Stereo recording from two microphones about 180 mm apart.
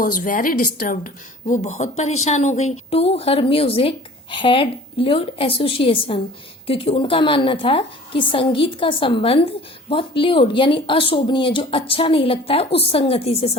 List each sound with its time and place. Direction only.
0.0 s a woman's voice: 50° left (ahead or behind); by 13.6 s 35° left (ahead or behind)